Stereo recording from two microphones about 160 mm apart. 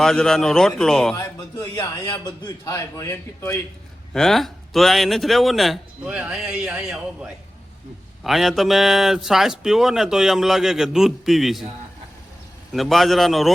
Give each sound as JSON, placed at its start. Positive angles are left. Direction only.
{"t": 0.0, "sound": "speech", "side_deg": 5}
{"t": 1.1, "sound": "a man's voice", "side_deg": 20}
{"t": 4.1, "sound": "speech", "side_deg": 0}
{"t": 12.7, "sound": "speech", "side_deg": 0}